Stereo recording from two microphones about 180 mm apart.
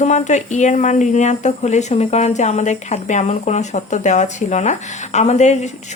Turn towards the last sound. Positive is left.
turn(degrees=40)  # may be behind; listen again after turning